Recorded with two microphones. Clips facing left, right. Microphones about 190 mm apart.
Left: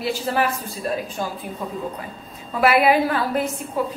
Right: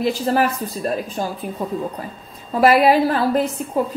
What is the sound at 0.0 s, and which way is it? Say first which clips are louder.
A woman's voice: right 4 dB; 40° right (ahead or behind).